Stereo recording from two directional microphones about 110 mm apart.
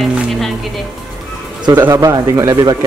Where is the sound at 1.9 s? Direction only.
30° right (ahead or behind).